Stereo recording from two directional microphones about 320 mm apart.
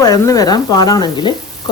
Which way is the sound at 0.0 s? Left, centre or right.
Centre.